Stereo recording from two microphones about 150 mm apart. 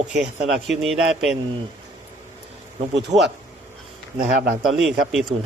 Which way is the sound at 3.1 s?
25° right (ahead or behind).